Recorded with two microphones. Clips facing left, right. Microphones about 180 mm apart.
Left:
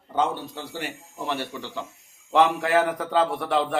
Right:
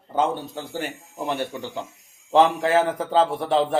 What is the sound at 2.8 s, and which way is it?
Speech, 25° right (ahead or behind).